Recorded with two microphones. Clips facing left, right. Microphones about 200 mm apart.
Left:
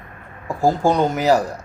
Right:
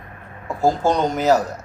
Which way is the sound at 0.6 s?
10° left (ahead or behind).